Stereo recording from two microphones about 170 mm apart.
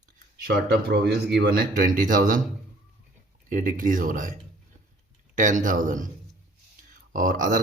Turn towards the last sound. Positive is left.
turn(degrees=-50)  # may be behind; listen again after turning